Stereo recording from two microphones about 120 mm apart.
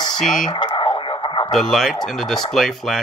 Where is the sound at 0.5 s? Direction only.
40° left (ahead or behind).